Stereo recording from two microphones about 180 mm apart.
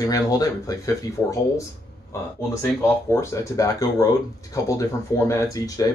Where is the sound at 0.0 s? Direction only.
20° left (ahead or behind).